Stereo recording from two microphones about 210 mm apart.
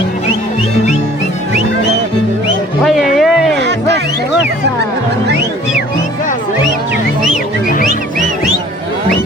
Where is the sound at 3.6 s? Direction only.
55° right (ahead or behind).